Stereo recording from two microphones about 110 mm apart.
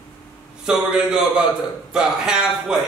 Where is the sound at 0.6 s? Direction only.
5° right (ahead or behind).